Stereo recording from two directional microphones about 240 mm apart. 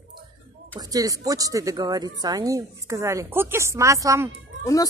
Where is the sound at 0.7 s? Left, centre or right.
Centre.